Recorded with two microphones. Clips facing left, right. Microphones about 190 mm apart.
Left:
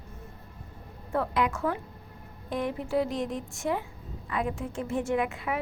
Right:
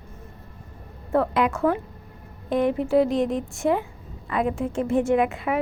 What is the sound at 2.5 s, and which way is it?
Speech, 80° right.